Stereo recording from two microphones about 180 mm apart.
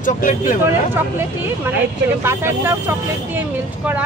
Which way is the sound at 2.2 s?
15° right (ahead or behind).